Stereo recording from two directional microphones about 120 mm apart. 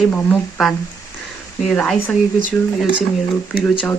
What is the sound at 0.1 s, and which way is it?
Speech, 15° left (ahead or behind).